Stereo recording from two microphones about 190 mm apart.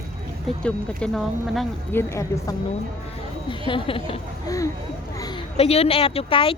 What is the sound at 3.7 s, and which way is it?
Speech, 25° left (ahead or behind).